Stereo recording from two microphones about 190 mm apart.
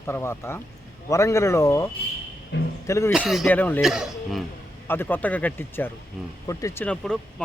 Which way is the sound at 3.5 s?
10° left (ahead or behind).